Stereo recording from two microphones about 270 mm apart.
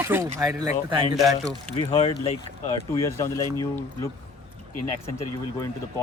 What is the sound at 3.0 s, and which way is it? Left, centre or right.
Speech, centre.